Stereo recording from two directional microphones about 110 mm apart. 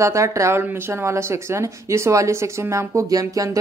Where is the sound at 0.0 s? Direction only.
25° right (ahead or behind).